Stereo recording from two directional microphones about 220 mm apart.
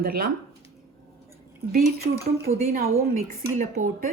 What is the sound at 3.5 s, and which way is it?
Speech, 35° right (ahead or behind).